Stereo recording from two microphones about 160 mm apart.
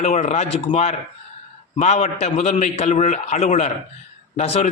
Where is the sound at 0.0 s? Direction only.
45° left (ahead or behind).